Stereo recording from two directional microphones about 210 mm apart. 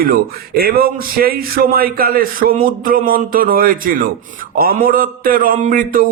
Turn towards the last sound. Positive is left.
turn(degrees=-40)  # may be behind; listen again after turning